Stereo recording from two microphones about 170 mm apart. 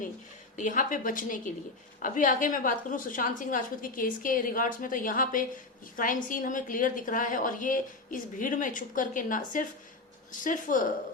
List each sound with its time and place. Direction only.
0.6 s a woman's voice: 50° left (ahead or behind)